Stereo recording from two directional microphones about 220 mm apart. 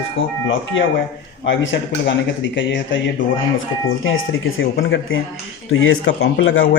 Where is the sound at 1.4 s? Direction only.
55° left (ahead or behind).